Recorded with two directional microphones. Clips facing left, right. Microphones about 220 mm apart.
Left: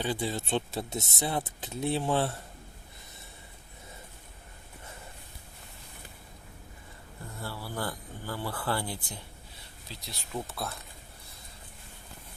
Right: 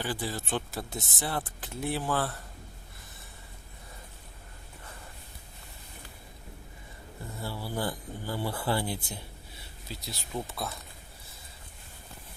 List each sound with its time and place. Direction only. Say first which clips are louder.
0.0 s speech: left 2 dB; 20° left (ahead or behind)
7.4 s speech: right 3 dB; 15° right (ahead or behind)
9.0 s speech: right 2 dB; 5° right (ahead or behind)